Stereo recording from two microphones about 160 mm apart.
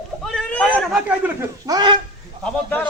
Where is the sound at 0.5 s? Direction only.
10° left (ahead or behind).